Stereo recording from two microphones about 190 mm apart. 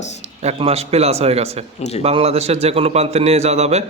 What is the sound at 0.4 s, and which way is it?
A man's voice, 35° right (ahead or behind).